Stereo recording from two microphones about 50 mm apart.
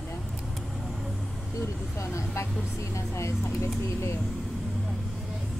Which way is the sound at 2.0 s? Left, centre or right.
Left.